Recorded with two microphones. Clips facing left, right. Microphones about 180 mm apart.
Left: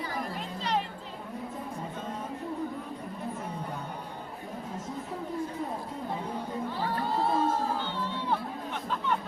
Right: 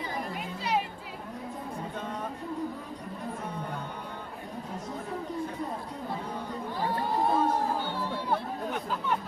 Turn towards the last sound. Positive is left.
turn(degrees=-15)  # may be behind; listen again after turning